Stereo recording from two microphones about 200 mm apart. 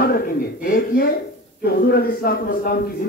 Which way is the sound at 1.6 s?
50° left (ahead or behind).